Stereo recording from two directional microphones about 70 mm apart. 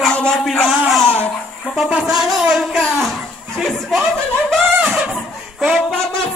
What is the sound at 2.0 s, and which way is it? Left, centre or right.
Music, centre.